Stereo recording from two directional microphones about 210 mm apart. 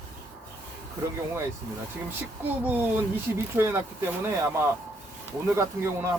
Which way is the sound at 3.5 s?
10° right (ahead or behind).